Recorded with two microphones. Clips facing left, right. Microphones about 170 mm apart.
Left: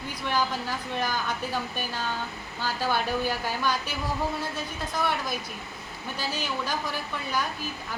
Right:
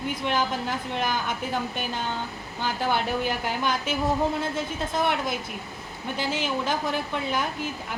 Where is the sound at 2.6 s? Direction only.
20° right (ahead or behind).